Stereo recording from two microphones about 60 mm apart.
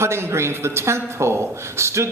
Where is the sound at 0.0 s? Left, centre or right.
Right.